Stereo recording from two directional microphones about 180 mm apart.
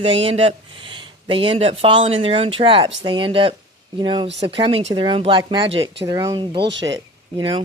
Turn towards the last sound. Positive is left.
turn(degrees=-25)  # may be behind; listen again after turning